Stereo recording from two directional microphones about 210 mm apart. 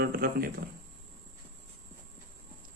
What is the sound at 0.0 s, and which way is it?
Speech, 45° right (ahead or behind).